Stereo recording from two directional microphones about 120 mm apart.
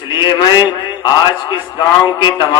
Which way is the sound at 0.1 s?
40° left (ahead or behind).